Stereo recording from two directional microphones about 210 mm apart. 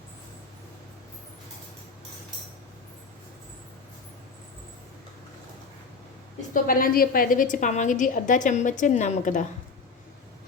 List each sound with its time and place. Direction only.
6.5 s a woman's voice: 45° left (ahead or behind)